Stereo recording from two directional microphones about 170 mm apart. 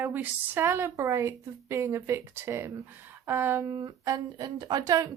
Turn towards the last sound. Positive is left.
turn(degrees=-20)  # may be behind; listen again after turning